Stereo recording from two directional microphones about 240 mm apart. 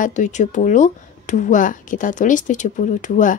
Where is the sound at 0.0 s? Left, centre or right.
Left.